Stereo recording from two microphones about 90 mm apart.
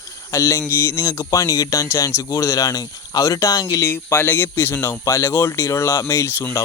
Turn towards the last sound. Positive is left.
turn(degrees=25)  # may be behind; listen again after turning